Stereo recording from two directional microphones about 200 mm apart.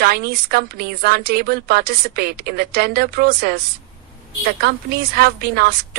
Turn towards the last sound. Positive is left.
turn(degrees=-50)  # may be behind; listen again after turning